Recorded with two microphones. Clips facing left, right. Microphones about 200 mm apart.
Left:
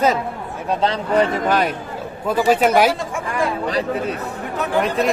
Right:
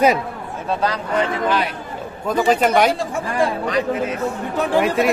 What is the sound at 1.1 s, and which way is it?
Speech, 40° left (ahead or behind).